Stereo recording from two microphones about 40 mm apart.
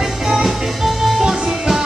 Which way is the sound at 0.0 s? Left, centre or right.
Centre.